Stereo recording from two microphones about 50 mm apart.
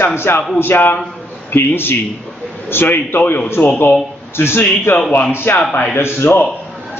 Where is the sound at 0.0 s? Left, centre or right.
Left.